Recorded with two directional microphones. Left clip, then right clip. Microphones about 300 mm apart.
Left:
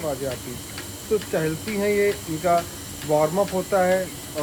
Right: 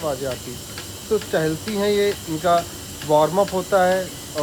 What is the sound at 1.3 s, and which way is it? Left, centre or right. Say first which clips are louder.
Speech: right 3 dB; centre.